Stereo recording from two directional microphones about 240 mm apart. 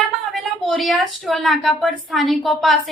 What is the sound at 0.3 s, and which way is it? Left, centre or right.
A woman's voice, centre.